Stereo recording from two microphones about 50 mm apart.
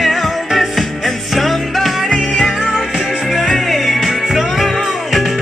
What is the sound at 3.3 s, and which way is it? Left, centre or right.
Music, centre.